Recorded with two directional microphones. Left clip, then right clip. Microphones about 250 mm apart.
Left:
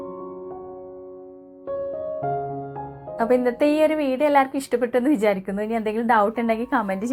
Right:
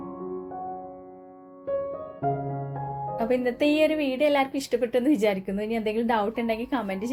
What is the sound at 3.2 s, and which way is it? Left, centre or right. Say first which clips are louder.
A woman's voice: left 6 dB; centre.